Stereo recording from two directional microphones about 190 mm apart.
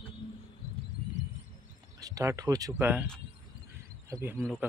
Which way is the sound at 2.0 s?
20° right (ahead or behind).